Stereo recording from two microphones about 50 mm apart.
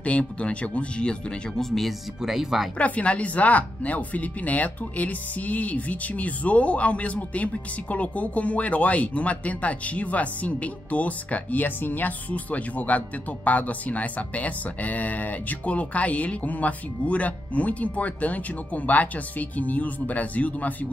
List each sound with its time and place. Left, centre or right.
0.0 s speech: left
1.6 s speech: centre
2.8 s speech: left